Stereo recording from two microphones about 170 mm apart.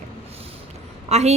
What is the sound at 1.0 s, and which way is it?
Speech, 40° right (ahead or behind).